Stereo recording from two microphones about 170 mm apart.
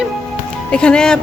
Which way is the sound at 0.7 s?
5° left (ahead or behind).